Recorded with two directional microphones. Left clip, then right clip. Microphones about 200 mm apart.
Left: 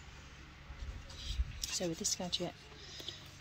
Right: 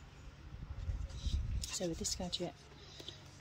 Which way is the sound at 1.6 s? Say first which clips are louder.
Left 2 dB; 5° right (ahead or behind).